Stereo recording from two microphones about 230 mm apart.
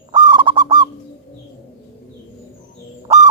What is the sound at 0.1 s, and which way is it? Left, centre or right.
Bird, centre.